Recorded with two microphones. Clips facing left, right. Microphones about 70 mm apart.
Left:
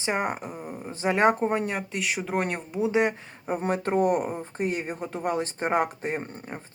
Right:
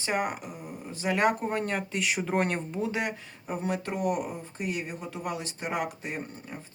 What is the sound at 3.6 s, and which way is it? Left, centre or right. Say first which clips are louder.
Speech: left 6 dB; left.